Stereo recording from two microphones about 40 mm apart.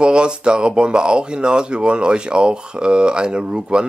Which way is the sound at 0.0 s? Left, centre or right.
Right.